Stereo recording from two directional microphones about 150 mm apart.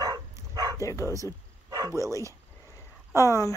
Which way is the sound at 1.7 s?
25° right (ahead or behind).